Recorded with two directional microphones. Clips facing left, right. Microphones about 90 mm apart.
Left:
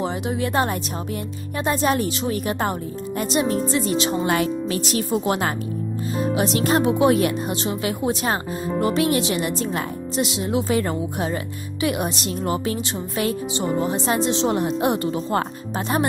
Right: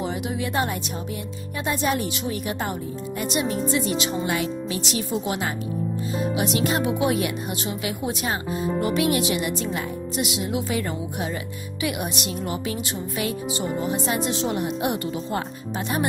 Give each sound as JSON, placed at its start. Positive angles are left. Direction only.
{"t": 0.0, "sound": "speech", "side_deg": 35}
{"t": 6.3, "sound": "speech", "side_deg": 40}